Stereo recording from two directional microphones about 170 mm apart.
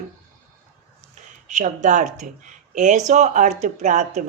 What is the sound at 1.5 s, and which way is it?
Speech, 45° right (ahead or behind).